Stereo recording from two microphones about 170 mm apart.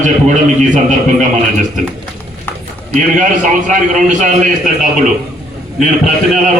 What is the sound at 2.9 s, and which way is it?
A man's voice, 50° right (ahead or behind).